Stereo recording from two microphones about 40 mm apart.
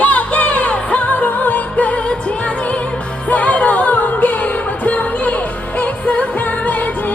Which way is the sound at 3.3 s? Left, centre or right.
Left.